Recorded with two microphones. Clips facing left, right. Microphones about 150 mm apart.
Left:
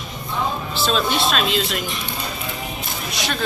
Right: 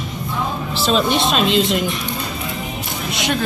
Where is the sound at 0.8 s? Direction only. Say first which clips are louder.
Right 4 dB; 15° right (ahead or behind).